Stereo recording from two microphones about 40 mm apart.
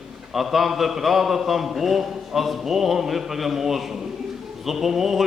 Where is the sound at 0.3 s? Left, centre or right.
Centre.